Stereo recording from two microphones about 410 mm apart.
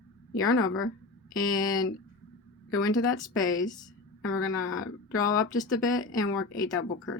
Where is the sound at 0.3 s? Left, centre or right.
Left.